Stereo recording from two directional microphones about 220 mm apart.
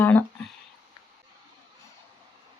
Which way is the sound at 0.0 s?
10° left (ahead or behind).